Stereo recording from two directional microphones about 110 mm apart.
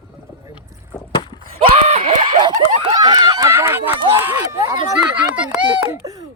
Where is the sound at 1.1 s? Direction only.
50° left (ahead or behind).